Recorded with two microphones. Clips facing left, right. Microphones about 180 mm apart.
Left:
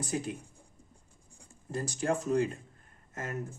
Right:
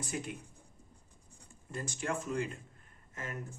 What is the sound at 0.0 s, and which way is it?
Speech, 35° left (ahead or behind).